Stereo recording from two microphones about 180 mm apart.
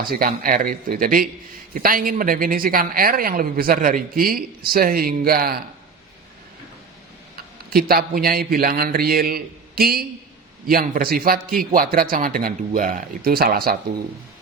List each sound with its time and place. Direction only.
0.1 s a woman's voice: 55° right (ahead or behind)
7.7 s a man's voice: 55° right (ahead or behind)